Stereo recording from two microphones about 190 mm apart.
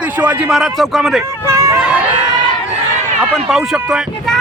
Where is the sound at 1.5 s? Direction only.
15° right (ahead or behind).